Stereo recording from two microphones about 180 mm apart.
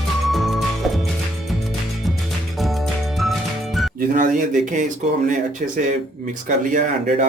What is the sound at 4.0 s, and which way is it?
Speech, 50° right (ahead or behind).